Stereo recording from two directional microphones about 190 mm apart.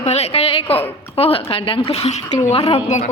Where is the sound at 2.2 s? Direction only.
20° left (ahead or behind); by 3.1 s 40° left (ahead or behind).